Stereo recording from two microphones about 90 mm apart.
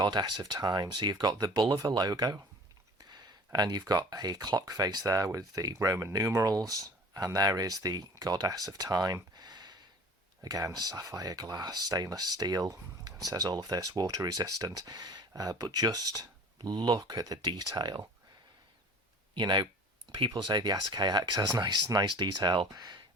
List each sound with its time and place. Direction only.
0.0 s speech: 55° right (ahead or behind)
9.3 s a sound: 50° right (ahead or behind)
10.4 s speech: 40° right (ahead or behind)
16.6 s speech: 55° right (ahead or behind)
19.3 s speech: 60° right (ahead or behind)
22.7 s speech: 45° right (ahead or behind)